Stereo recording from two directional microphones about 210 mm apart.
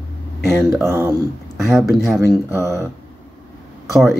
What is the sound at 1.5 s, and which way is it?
Speech, centre (ahead or behind).